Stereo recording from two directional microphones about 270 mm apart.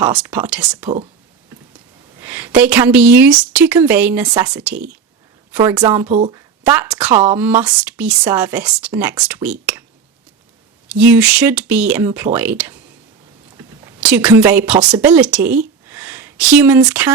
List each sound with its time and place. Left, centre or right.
0.0 s speech: centre
2.2 s a woman's voice: centre
6.1 s speech: right
6.3 s a woman's voice: centre
10.8 s a woman's voice: centre
14.8 s speech: centre
15.1 s a woman's voice: centre
15.9 s a sound: centre